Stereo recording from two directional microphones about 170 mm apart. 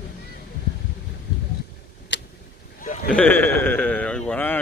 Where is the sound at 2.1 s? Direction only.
90° left.